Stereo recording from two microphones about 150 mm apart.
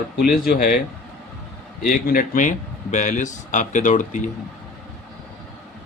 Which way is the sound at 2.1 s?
65° left (ahead or behind).